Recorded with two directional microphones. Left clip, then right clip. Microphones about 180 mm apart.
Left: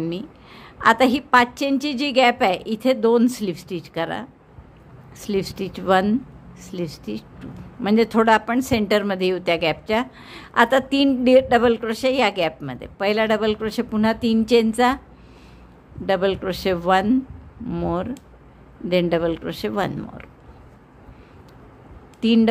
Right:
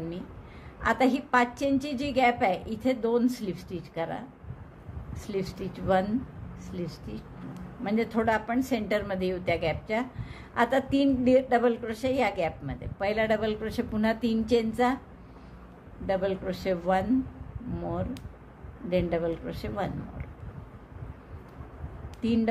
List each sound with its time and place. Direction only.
0.7 s a woman's voice: 40° left (ahead or behind)
16.1 s a man's voice: 45° left (ahead or behind)
22.2 s speech: 40° left (ahead or behind)